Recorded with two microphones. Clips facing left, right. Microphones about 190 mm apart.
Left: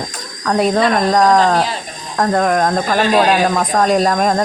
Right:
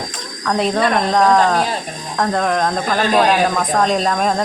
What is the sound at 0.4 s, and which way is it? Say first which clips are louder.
Speech: left 3 dB; 5° left (ahead or behind).